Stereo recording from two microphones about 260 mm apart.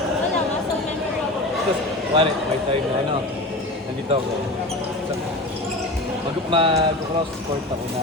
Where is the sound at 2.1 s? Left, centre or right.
Centre.